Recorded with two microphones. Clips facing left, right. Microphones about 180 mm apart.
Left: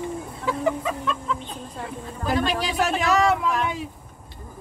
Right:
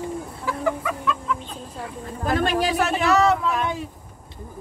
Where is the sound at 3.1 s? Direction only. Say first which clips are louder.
Right 1 dB; 10° left (ahead or behind).